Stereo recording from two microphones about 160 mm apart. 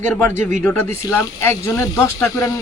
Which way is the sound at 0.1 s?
10° left (ahead or behind).